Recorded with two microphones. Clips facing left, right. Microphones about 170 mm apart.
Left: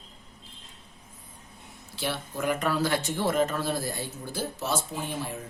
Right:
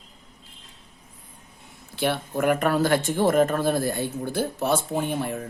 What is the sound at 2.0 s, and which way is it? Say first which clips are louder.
Speech: right 7 dB; 55° right (ahead or behind).